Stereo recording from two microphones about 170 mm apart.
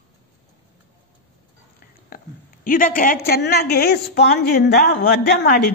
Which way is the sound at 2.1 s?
60° left (ahead or behind).